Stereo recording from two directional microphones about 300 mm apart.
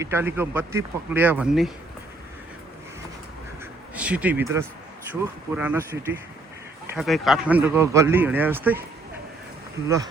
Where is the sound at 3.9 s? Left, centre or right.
Centre.